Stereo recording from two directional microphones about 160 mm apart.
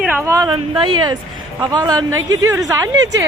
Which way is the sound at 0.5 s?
35° right (ahead or behind).